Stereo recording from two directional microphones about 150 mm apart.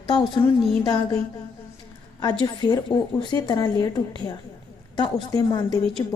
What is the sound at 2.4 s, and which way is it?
A woman's voice, 25° left (ahead or behind).